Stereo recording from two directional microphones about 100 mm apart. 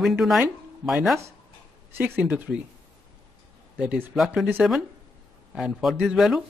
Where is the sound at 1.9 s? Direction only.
20° right (ahead or behind).